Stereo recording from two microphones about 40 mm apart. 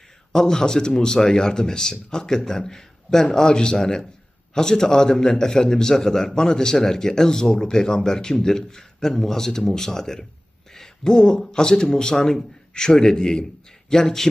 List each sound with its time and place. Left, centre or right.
0.3 s a man's voice: centre